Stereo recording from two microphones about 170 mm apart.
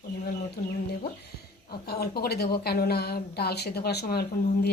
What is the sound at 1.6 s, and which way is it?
A woman's voice, 65° left (ahead or behind).